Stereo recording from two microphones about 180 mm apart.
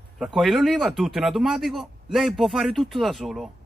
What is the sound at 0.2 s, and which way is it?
A man's voice, centre (ahead or behind).